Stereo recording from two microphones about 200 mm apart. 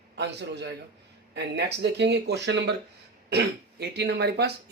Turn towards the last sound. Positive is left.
turn(degrees=-55)  # may be behind; listen again after turning